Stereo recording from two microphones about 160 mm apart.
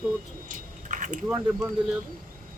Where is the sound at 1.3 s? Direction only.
10° right (ahead or behind).